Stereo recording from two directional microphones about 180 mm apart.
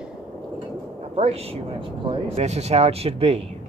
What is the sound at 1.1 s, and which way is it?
Speech, 35° right (ahead or behind).